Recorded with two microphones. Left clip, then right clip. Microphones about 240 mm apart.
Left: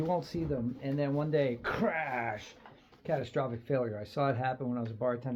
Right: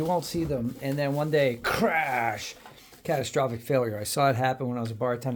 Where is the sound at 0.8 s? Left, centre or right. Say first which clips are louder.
Right 5 dB; right.